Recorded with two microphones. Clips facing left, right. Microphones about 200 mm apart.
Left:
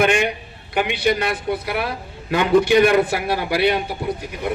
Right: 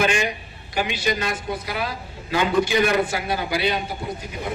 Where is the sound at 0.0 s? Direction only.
60° left (ahead or behind).